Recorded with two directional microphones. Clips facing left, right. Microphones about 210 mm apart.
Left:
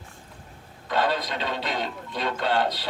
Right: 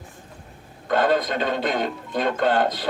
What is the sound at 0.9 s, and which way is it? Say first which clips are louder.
Speech: right 5 dB; 50° right (ahead or behind).